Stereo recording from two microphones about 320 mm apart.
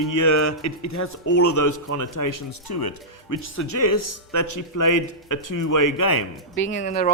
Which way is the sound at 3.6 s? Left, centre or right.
Left.